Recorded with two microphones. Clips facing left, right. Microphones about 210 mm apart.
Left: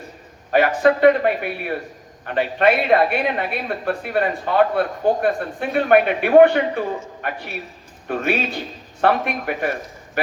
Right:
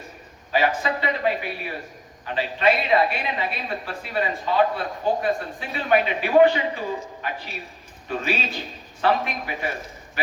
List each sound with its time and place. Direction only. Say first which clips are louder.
0.8 s a woman's voice: left 12 dB; 55° left (ahead or behind)